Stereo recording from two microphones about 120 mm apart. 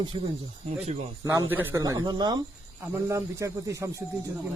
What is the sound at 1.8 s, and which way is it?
Speech, 30° right (ahead or behind).